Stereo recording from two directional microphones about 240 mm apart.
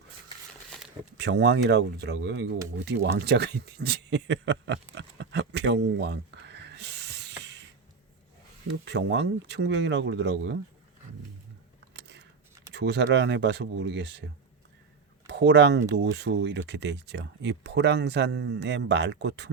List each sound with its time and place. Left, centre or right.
1.1 s speech: right
2.7 s a sound: right
8.6 s speech: right
11.9 s a sound: right
12.7 s speech: right
15.3 s speech: right